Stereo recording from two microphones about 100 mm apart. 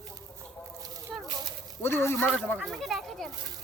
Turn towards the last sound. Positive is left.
turn(degrees=5)  # may be behind; listen again after turning